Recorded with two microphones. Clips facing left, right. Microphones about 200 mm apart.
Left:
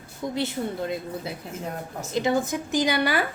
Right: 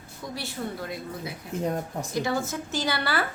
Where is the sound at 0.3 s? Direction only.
25° left (ahead or behind).